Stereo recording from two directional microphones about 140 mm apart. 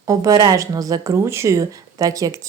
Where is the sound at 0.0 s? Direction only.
25° right (ahead or behind).